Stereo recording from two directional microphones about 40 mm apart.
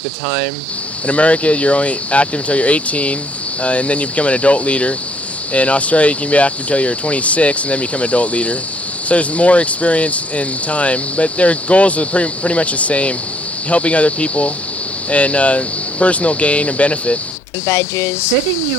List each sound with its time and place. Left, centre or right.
1.0 s speech: left
17.7 s speech: left